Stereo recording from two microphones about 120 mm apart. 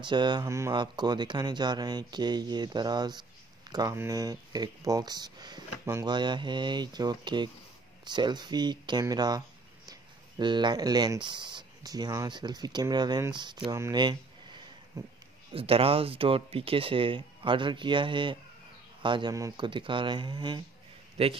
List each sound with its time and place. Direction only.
0.0 s speech: 40° right (ahead or behind)
0.5 s speech: 25° right (ahead or behind)
0.7 s speech: 35° right (ahead or behind)
10.4 s speech: 40° right (ahead or behind)
13.7 s speech: 25° right (ahead or behind)
13.9 s a sound: 40° right (ahead or behind)
15.5 s speech: 50° right (ahead or behind)
21.2 s a man's voice: 60° right (ahead or behind)